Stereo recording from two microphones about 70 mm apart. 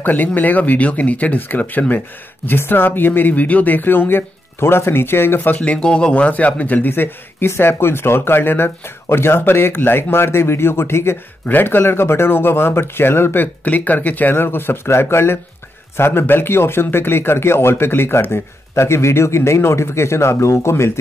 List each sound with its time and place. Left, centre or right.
0.0 s speech: left
5.6 s speech: centre; by 13.5 s left
13.7 s speech: left